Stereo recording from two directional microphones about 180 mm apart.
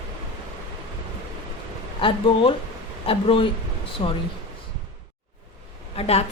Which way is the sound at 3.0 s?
30° left (ahead or behind).